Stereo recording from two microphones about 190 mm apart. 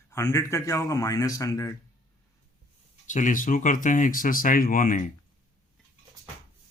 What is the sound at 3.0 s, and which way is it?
Speech, 40° left (ahead or behind).